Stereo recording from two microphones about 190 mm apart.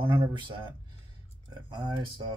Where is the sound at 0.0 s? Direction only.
25° right (ahead or behind).